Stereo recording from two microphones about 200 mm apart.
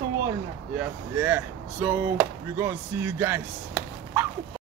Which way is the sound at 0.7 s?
10° right (ahead or behind).